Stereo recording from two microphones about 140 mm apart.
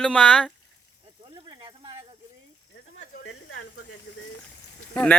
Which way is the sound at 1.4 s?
30° right (ahead or behind).